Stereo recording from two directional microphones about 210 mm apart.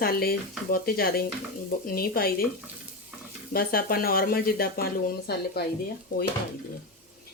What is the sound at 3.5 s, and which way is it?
Speech, 45° left (ahead or behind).